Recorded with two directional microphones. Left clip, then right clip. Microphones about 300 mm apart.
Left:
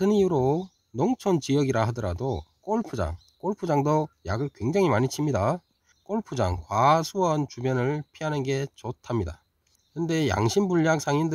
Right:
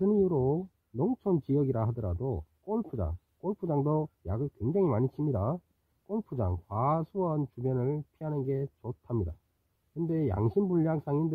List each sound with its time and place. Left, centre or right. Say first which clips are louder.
0.0 s speech: left 5 dB; left